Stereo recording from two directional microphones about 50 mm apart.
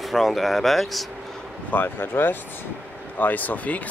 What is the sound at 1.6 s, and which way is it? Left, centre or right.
Speech, left.